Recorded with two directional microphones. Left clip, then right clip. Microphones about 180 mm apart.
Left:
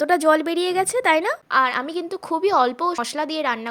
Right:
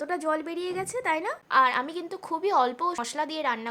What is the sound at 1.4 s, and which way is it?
A woman's voice, 20° left (ahead or behind).